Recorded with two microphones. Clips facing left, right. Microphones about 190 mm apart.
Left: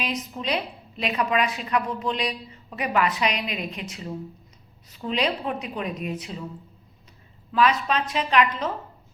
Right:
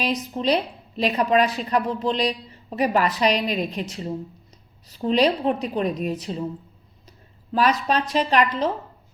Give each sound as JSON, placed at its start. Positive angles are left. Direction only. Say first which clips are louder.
{"t": 0.0, "sound": "a woman's voice", "louder": "right 6 dB", "side_deg": -35}
{"t": 7.5, "sound": "a woman's voice", "louder": "right 1 dB", "side_deg": -40}